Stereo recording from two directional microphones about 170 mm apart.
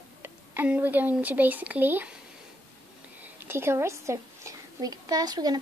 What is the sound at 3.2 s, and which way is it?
A woman's voice, 15° right (ahead or behind).